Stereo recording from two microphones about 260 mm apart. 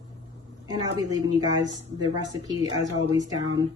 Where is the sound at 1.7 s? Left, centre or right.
Centre.